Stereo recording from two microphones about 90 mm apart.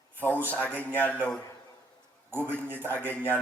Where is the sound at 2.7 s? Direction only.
20° left (ahead or behind).